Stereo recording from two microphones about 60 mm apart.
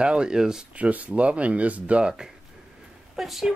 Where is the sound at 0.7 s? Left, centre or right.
Right.